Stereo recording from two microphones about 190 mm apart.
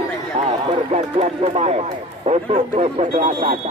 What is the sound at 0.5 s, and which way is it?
Speech, 25° right (ahead or behind).